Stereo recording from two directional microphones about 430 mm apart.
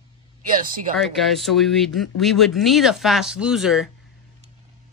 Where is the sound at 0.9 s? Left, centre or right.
Centre.